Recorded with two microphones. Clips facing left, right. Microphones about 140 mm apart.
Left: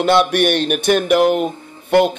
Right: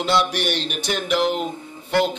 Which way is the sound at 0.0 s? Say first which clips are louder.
Left 7 dB; 55° left (ahead or behind).